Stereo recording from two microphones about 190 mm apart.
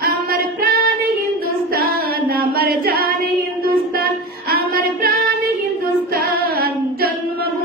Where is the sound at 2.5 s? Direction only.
55° right (ahead or behind).